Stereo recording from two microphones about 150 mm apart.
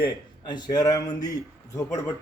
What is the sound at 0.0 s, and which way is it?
A man's voice, 30° left (ahead or behind).